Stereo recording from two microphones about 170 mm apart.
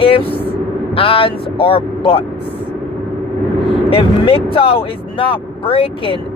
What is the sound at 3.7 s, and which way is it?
Speech, 30° left (ahead or behind).